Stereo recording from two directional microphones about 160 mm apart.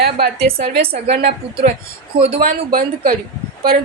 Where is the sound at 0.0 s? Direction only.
75° right (ahead or behind).